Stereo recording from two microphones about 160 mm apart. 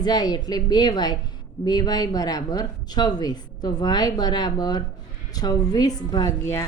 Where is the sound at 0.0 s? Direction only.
25° left (ahead or behind).